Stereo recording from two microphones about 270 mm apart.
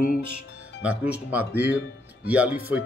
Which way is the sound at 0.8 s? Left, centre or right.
Centre.